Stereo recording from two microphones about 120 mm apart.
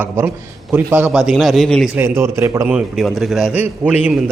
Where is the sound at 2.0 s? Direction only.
20° right (ahead or behind).